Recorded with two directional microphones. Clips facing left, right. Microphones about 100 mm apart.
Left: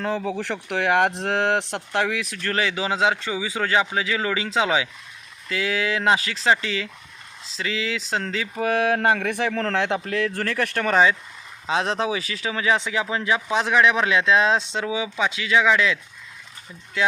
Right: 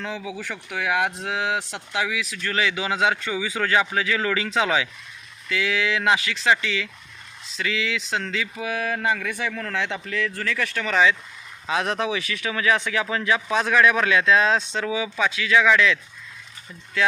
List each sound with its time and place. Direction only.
0.0 s speech: 50° left (ahead or behind); by 4.9 s 25° left (ahead or behind)
5.5 s speech: 35° left (ahead or behind)
8.6 s speech: 60° left (ahead or behind); by 16.0 s 25° left (ahead or behind)